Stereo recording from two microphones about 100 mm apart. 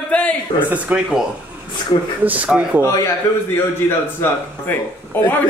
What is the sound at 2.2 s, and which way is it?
Speech, 15° right (ahead or behind).